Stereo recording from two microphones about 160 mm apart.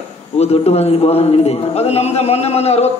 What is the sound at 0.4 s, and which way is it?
A man's voice, 40° left (ahead or behind).